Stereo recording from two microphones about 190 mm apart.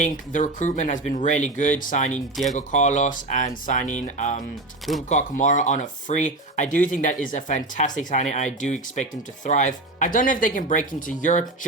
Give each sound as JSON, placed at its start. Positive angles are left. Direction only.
{"t": 0.0, "sound": "speech", "side_deg": 40}